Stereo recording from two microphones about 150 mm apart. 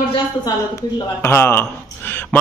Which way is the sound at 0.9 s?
15° left (ahead or behind).